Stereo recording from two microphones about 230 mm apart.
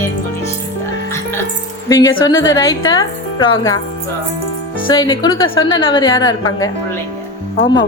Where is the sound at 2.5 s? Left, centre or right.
Centre.